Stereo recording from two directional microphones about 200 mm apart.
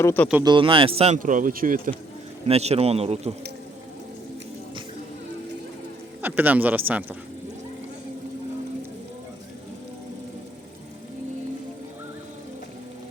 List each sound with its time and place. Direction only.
0.0 s speech: 10° left (ahead or behind)
0.4 s speech: 25° right (ahead or behind); by 1.9 s 45° right (ahead or behind)
2.5 s speech: 30° right (ahead or behind)
6.2 s speech: 10° right (ahead or behind)